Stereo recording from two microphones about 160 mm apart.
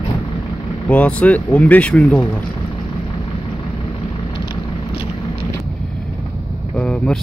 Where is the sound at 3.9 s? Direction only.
30° left (ahead or behind).